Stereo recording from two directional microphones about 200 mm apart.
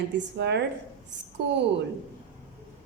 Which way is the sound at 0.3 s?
60° right (ahead or behind).